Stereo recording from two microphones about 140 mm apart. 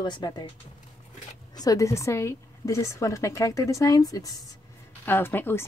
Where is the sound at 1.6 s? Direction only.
25° left (ahead or behind).